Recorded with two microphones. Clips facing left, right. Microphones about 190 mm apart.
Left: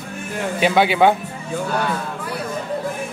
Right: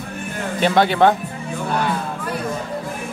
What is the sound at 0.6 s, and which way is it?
Speech, 5° left (ahead or behind).